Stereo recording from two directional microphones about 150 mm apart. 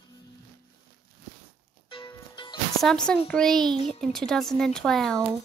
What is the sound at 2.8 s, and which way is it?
Speech, 5° left (ahead or behind).